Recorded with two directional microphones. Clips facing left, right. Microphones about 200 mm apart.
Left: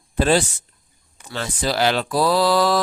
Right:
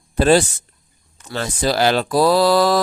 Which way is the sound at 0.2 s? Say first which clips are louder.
Right 4 dB; 40° right (ahead or behind).